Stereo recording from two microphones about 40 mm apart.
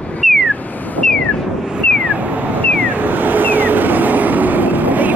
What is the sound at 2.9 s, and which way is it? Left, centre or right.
Vehicle, right.